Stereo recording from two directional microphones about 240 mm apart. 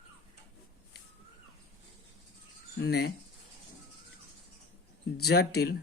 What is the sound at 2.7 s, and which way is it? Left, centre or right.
Speech, left.